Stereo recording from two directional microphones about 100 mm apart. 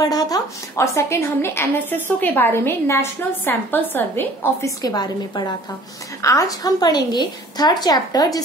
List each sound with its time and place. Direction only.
0.0 s speech: 40° left (ahead or behind)
0.7 s a woman's voice: 30° left (ahead or behind)
4.6 s a woman's voice: 40° left (ahead or behind)